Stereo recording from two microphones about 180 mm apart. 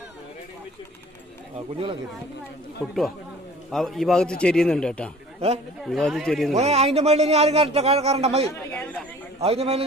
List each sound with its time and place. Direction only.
2.8 s a man's voice: centre (ahead or behind)
6.5 s speech: 35° right (ahead or behind)
8.7 s a sound: 10° left (ahead or behind)
9.4 s speech: 35° right (ahead or behind)